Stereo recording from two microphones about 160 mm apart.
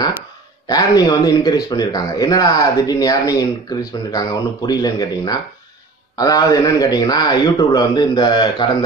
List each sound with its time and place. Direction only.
0.7 s speech: 25° left (ahead or behind)